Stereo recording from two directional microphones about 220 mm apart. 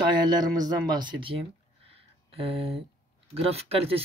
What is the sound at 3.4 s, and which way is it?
Speech, 25° right (ahead or behind).